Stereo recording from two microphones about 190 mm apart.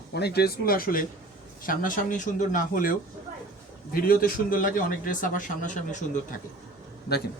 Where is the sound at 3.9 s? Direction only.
50° left (ahead or behind).